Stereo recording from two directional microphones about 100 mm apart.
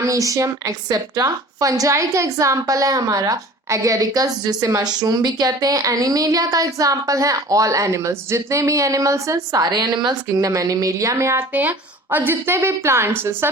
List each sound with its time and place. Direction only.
0.0 s a woman's voice: 35° right (ahead or behind)